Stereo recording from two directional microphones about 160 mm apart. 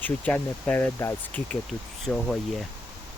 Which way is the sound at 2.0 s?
Centre (ahead or behind).